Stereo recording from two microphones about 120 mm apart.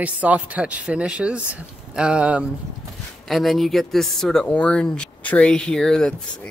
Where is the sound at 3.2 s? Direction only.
Centre (ahead or behind).